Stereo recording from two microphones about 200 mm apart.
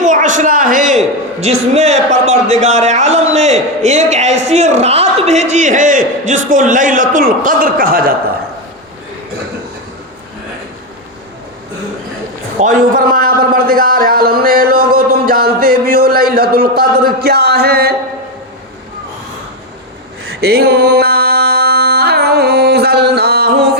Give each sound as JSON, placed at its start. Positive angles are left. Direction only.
{"t": 0.0, "sound": "a sound", "side_deg": -40}
{"t": 1.4, "sound": "a man's voice", "side_deg": -35}
{"t": 12.5, "sound": "a man's voice", "side_deg": -45}
{"t": 20.2, "sound": "music", "side_deg": -55}